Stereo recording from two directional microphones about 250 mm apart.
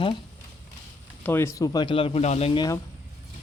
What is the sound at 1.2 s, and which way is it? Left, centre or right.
Speech, centre.